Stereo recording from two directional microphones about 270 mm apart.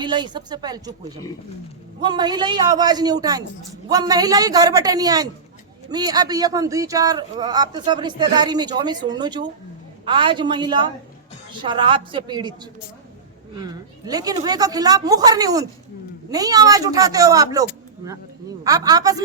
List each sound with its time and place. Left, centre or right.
0.0 s speech: centre
2.0 s speech: centre
13.6 s speech: centre